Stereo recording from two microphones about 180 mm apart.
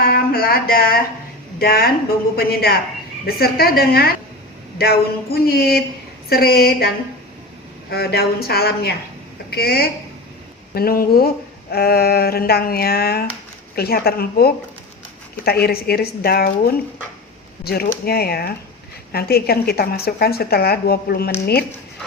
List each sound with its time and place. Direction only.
0.0 s speech: 60° left (ahead or behind)